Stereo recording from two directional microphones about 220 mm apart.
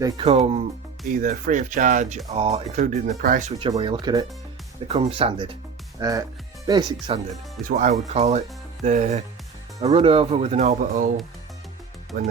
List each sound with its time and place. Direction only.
0.0 s speech: 20° right (ahead or behind); by 3.5 s 40° right (ahead or behind)
3.6 s speech: 25° right (ahead or behind)
7.6 s speech: 35° right (ahead or behind)
12.1 s speech: 45° right (ahead or behind)